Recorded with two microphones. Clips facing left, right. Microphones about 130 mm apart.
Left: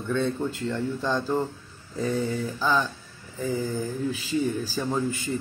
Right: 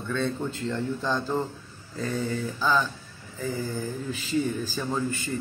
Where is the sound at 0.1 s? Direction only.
10° left (ahead or behind).